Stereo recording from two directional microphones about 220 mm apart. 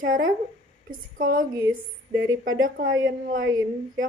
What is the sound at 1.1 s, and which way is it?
Speech, 40° right (ahead or behind).